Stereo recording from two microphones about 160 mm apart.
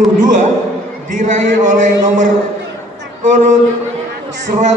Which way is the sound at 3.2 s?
50° right (ahead or behind).